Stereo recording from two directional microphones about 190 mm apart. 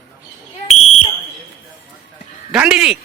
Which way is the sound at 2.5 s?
5° right (ahead or behind).